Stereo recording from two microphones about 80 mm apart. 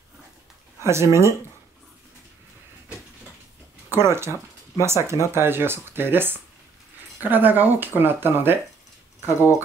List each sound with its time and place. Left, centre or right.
0.8 s speech: right
3.9 s speech: right